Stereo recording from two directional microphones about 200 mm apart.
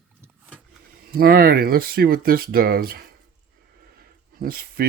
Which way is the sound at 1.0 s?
50° right (ahead or behind).